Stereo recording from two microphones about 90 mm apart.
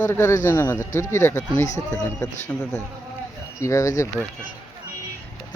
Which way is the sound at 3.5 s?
35° left (ahead or behind).